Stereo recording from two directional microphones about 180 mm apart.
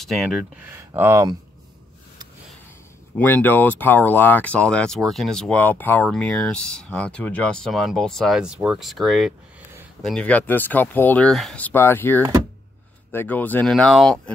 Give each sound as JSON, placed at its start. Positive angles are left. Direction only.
{"t": 0.0, "sound": "speech", "side_deg": 0}
{"t": 3.2, "sound": "speech", "side_deg": 10}